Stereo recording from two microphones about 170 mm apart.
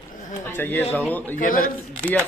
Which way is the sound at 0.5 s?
10° left (ahead or behind).